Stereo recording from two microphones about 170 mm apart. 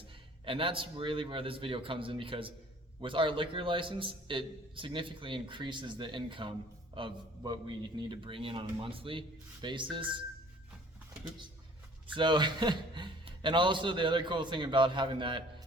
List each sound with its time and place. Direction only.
0.4 s a man's voice: 30° right (ahead or behind)
12.0 s a man's voice: 30° right (ahead or behind)